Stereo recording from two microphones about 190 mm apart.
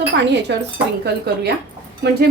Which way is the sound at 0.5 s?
65° right (ahead or behind).